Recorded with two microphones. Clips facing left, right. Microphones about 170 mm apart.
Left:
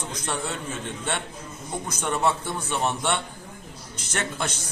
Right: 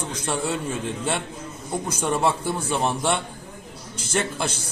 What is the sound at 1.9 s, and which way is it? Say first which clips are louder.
A man's voice: right 2 dB; 10° right (ahead or behind).